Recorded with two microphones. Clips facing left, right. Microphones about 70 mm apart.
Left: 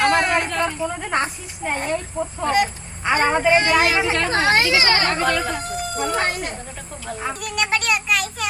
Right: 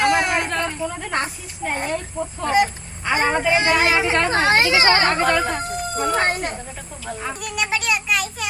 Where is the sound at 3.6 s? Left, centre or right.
Right.